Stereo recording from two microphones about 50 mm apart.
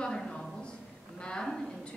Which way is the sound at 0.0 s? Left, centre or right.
Centre.